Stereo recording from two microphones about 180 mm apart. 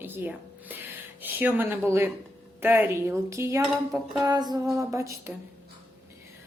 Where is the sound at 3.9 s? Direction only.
20° right (ahead or behind).